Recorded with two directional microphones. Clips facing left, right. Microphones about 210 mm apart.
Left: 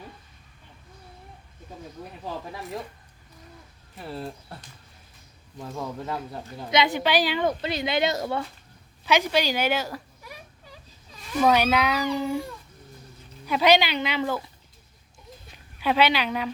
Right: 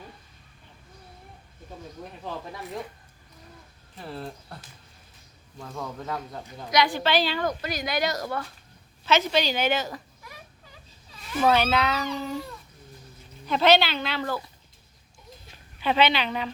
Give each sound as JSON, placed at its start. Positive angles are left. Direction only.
{"t": 3.9, "sound": "speech", "side_deg": 0}
{"t": 5.6, "sound": "speech", "side_deg": 5}
{"t": 6.7, "sound": "speech", "side_deg": 25}
{"t": 7.4, "sound": "speech", "side_deg": 25}
{"t": 9.0, "sound": "speech", "side_deg": 10}
{"t": 11.4, "sound": "speech", "side_deg": 15}
{"t": 15.8, "sound": "speech", "side_deg": 10}